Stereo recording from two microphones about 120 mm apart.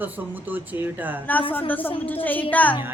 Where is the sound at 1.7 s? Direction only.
15° left (ahead or behind).